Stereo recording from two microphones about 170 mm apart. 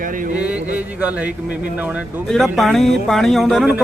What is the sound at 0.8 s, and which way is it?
Speech, 10° right (ahead or behind).